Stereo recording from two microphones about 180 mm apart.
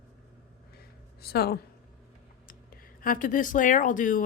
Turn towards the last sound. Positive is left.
turn(degrees=45)  # may be behind; listen again after turning